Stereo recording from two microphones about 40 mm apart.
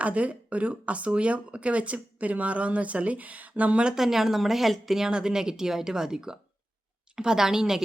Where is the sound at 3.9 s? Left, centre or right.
Centre.